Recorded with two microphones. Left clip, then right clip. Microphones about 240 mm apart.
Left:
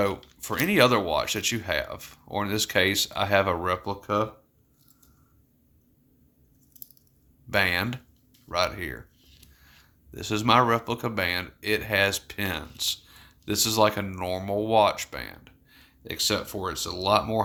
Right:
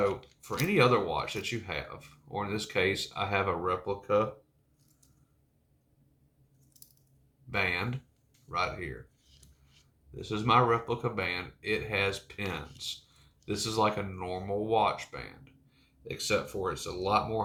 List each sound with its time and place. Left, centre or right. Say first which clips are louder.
0.0 s speech: left 3 dB; left
7.5 s speech: left 6 dB; left
10.2 s speech: left 4 dB; left